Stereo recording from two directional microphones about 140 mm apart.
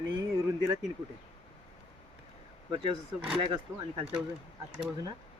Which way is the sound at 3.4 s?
35° right (ahead or behind).